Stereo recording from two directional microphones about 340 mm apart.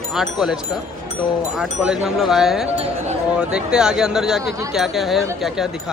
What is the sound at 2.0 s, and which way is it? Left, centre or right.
Speech, centre.